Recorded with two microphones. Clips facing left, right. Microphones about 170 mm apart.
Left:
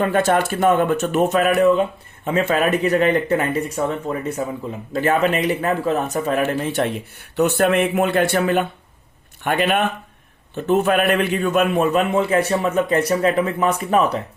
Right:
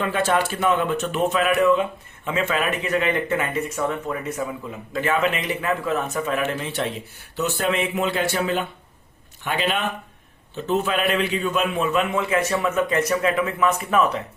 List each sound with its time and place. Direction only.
0.0 s speech: 50° left (ahead or behind)